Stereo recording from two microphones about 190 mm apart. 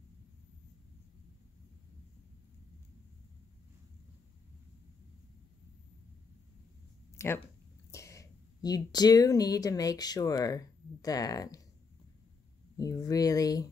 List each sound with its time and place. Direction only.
7.2 s speech: 10° left (ahead or behind)
12.7 s speech: 20° left (ahead or behind)